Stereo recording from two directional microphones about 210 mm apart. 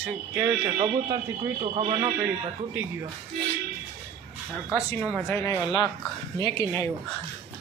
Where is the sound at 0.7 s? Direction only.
25° right (ahead or behind).